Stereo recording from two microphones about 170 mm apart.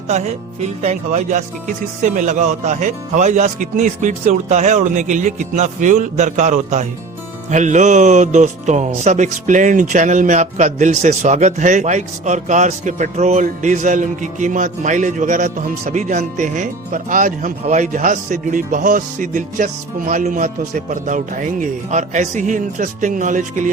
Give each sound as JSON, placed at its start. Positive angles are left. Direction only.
{"t": 0.1, "sound": "speech", "side_deg": -40}